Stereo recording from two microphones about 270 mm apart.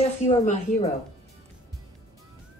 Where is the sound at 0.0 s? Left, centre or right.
Left.